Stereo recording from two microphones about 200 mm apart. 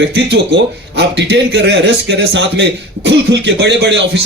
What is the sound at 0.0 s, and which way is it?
Speech, 60° right (ahead or behind).